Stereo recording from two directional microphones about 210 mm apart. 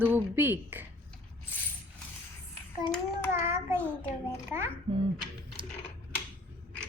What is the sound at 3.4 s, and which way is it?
Child singing, 10° right (ahead or behind).